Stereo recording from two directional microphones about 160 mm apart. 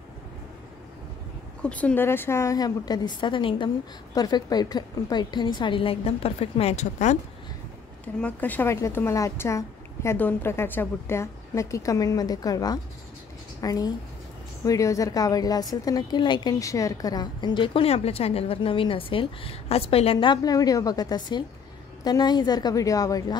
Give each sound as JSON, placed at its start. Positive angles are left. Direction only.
{"t": 1.6, "sound": "a woman's voice", "side_deg": 5}
{"t": 8.2, "sound": "a woman's voice", "side_deg": 10}